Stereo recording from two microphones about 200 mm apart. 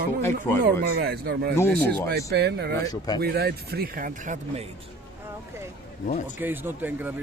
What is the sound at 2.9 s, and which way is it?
Speech, 20° left (ahead or behind).